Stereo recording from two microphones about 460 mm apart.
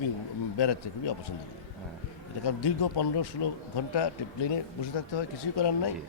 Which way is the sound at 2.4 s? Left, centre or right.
Left.